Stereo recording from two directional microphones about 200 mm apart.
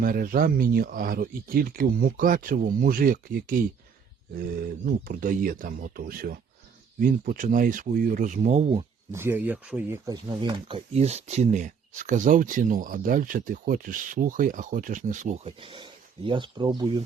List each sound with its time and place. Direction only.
0.0 s speech: 45° right (ahead or behind)
9.1 s speech: 10° right (ahead or behind)
10.1 s speech: 20° right (ahead or behind)